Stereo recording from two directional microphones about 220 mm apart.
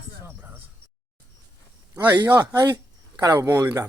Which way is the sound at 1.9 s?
15° right (ahead or behind).